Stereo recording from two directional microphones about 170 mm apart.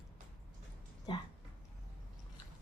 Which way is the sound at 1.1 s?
30° left (ahead or behind).